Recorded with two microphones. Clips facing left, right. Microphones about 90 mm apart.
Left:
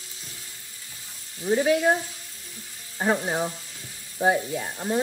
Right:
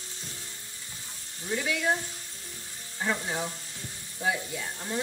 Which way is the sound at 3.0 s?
40° left (ahead or behind).